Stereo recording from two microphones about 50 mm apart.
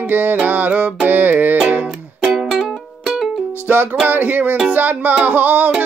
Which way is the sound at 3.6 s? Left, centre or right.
Right.